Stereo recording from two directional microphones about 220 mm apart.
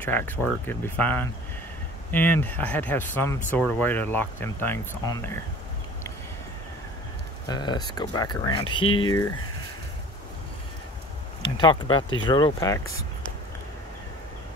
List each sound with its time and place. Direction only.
0.0 s speech: 10° left (ahead or behind)
7.4 s speech: 20° left (ahead or behind)
11.4 s speech: 20° left (ahead or behind)